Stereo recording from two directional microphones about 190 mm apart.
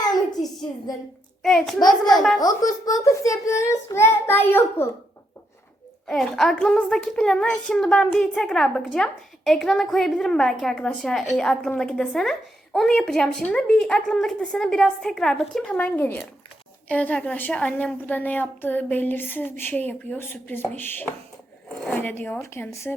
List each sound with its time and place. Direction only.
0.1 s a sound: 20° left (ahead or behind)
1.4 s a woman's voice: centre (ahead or behind)
1.9 s a child's voice: 20° left (ahead or behind)
6.1 s a woman's voice: centre (ahead or behind)